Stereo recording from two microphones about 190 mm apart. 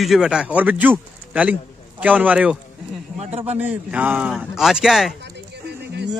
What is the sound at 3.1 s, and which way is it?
Speech, 35° right (ahead or behind).